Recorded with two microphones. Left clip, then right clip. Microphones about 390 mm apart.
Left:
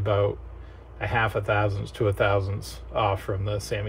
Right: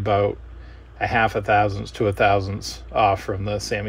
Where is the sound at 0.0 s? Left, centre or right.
Centre.